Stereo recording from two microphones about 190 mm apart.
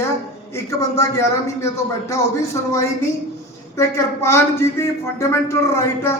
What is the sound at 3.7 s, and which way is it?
Speech, 15° left (ahead or behind).